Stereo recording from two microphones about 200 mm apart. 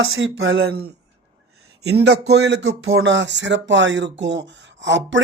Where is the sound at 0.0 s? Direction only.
80° right.